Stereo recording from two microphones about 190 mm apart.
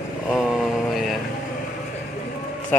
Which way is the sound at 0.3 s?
Centre (ahead or behind).